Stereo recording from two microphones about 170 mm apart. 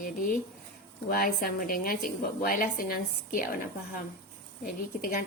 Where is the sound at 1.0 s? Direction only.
60° left (ahead or behind).